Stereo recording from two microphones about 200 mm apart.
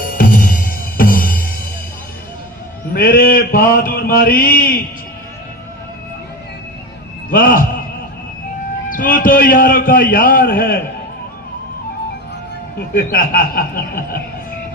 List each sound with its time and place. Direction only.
0.0 s music: 45° left (ahead or behind)
2.9 s mantra: 45° left (ahead or behind)
7.3 s mantra: 45° left (ahead or behind)
8.9 s a man's voice: 45° left (ahead or behind)
12.9 s mantra: 45° left (ahead or behind)